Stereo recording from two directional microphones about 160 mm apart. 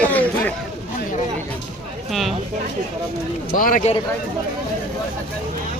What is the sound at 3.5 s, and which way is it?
Speech, 60° left (ahead or behind).